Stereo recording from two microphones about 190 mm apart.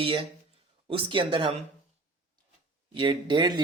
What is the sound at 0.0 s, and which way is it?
Speech, 25° right (ahead or behind).